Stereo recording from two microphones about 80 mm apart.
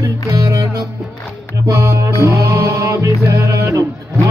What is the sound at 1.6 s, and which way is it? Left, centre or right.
Music, right.